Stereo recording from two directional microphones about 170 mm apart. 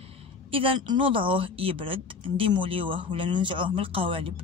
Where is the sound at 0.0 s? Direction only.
30° right (ahead or behind).